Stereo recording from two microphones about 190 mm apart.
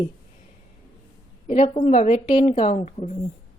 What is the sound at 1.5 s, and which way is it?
A woman's voice, 35° left (ahead or behind).